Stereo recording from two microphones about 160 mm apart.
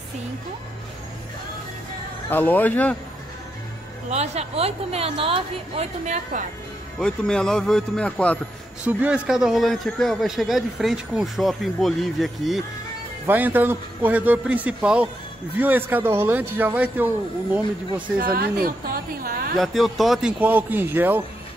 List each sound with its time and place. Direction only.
2.2 s speech: 10° left (ahead or behind)
4.1 s a woman's voice: 45° right (ahead or behind)
7.0 s speech: 5° left (ahead or behind)
8.8 s speech: 5° right (ahead or behind)
13.3 s a man's voice: 10° right (ahead or behind)
18.2 s a woman's voice: 65° right (ahead or behind)
19.5 s a man's voice: centre (ahead or behind)